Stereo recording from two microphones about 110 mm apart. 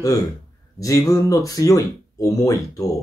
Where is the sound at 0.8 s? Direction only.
30° left (ahead or behind).